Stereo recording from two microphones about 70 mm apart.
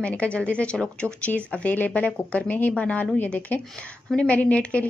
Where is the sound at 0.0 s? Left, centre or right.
Centre.